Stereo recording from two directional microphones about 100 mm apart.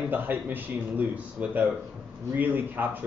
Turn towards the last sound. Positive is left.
turn(degrees=-20)  # may be behind; listen again after turning